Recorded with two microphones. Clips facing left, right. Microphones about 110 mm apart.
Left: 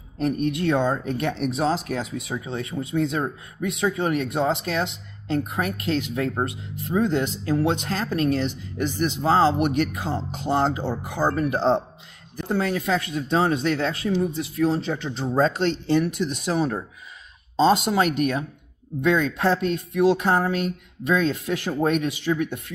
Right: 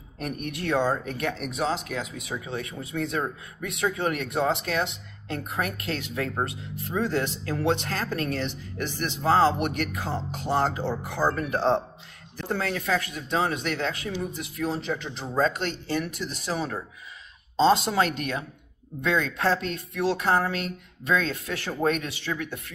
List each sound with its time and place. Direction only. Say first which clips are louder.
0.2 s speech: left 9 dB; 25° left (ahead or behind)